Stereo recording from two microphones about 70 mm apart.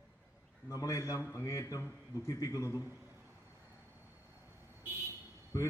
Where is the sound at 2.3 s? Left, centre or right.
Left.